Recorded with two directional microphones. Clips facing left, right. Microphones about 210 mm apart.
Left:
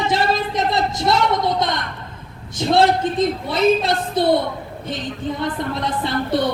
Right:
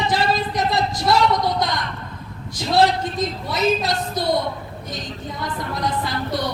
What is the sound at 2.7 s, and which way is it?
A woman's voice, 25° left (ahead or behind).